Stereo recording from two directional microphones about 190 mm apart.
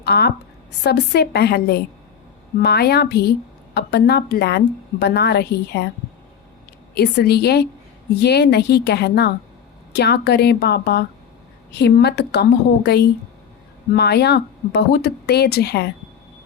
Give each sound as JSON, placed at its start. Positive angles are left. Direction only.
{"t": 0.0, "sound": "a woman's voice", "side_deg": 60}
{"t": 6.9, "sound": "a woman's voice", "side_deg": 60}